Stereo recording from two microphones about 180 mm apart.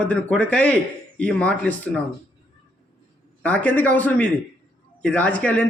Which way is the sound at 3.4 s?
5° left (ahead or behind).